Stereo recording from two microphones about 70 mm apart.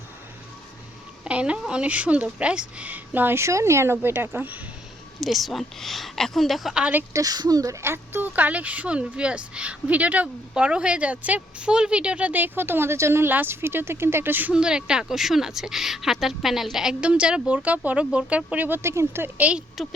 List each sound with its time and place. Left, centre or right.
1.2 s speech: centre
3.3 s a woman's voice: right
3.9 s speech: right
5.2 s a woman's voice: centre
7.1 s speech: right
7.8 s a woman's voice: right
14.5 s speech: centre
17.0 s speech: centre
18.8 s a woman's voice: right
19.4 s speech: centre